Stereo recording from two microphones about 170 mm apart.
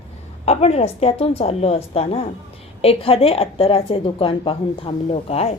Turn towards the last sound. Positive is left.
turn(degrees=35)  # may be behind; listen again after turning